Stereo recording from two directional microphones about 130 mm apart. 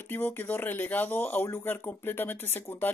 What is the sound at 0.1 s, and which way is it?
Speech, 15° left (ahead or behind).